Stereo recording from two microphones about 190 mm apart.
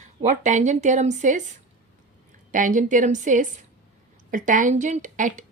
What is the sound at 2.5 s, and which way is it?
A woman's voice, 45° right (ahead or behind).